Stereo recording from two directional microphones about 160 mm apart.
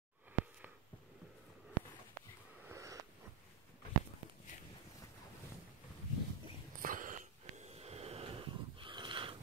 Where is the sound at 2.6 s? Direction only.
20° right (ahead or behind).